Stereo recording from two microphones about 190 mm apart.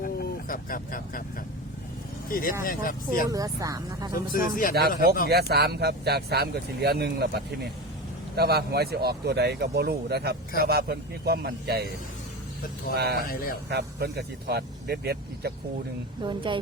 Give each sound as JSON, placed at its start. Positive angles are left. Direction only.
{"t": 0.0, "sound": "vehicle", "side_deg": 45}
{"t": 2.3, "sound": "speech", "side_deg": 50}
{"t": 3.2, "sound": "speech", "side_deg": -15}
{"t": 4.1, "sound": "speech", "side_deg": 45}
{"t": 4.7, "sound": "speech", "side_deg": -55}
{"t": 12.9, "sound": "speech", "side_deg": -60}
{"t": 13.2, "sound": "speech", "side_deg": 50}
{"t": 13.7, "sound": "speech", "side_deg": -60}
{"t": 16.2, "sound": "a woman's voice", "side_deg": -25}